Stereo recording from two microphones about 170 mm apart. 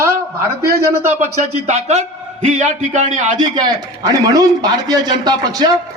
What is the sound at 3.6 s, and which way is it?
A man's voice, 20° right (ahead or behind).